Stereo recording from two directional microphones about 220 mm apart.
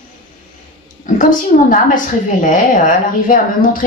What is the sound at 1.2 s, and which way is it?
A woman's voice, 35° left (ahead or behind).